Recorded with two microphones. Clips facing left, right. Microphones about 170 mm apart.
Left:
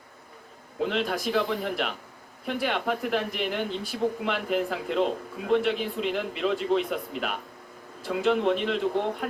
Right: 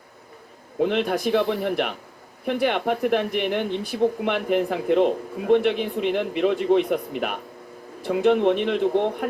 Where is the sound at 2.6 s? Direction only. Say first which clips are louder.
Right 5 dB; 55° right (ahead or behind).